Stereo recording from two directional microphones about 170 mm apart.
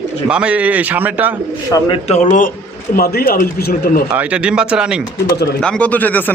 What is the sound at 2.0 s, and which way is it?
Speech, 45° left (ahead or behind).